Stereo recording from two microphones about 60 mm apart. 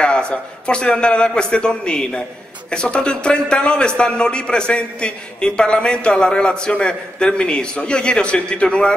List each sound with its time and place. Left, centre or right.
0.0 s a man's voice: centre